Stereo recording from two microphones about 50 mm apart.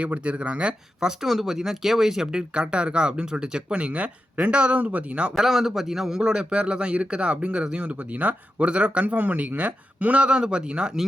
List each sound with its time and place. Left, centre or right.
0.0 s a man's voice: right
1.0 s a man's voice: centre; by 5.3 s right
5.4 s a man's voice: centre